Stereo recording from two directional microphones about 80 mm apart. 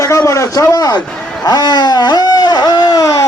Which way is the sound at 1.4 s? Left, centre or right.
Left.